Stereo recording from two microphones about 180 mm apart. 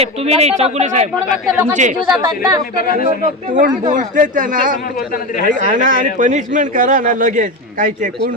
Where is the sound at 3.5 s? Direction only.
45° right (ahead or behind).